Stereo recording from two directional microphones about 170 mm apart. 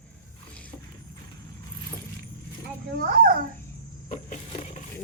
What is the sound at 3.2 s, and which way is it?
Babbling, 60° right (ahead or behind).